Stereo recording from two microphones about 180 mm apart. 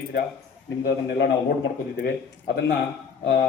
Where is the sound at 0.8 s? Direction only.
75° left (ahead or behind).